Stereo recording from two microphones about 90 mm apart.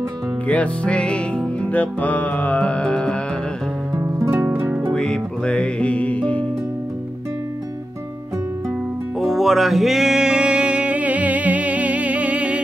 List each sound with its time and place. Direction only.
0.5 s music: 15° left (ahead or behind)
3.9 s music: 35° right (ahead or behind)
4.3 s music: 20° right (ahead or behind)
4.9 s music: 10° left (ahead or behind)
9.2 s music: centre (ahead or behind)